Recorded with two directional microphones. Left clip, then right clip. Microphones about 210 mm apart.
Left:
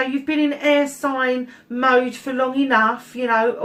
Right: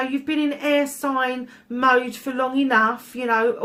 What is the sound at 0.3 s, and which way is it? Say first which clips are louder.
Speech: left 4 dB; 45° right (ahead or behind).